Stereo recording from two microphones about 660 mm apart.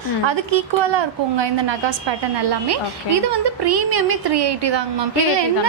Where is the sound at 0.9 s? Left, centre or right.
Right.